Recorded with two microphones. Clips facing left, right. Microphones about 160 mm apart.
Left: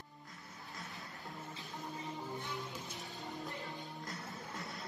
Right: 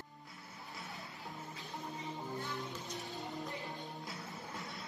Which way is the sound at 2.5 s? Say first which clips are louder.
Right 1 dB; centre (ahead or behind).